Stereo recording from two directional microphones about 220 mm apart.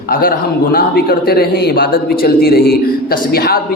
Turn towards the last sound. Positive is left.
turn(degrees=45)  # may be behind; listen again after turning